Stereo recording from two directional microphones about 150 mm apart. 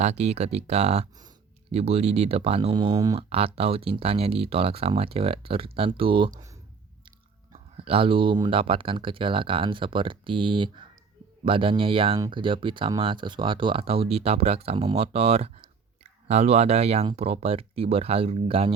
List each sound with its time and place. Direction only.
0.0 s speech: 45° right (ahead or behind); by 3.2 s 25° right (ahead or behind)
3.2 s speech: 40° right (ahead or behind)
7.5 s speech: 40° right (ahead or behind)